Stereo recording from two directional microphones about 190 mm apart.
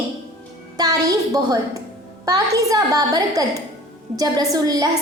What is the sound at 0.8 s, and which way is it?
A woman's voice, 20° right (ahead or behind).